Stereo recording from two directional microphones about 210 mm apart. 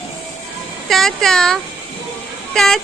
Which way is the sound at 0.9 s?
Centre (ahead or behind).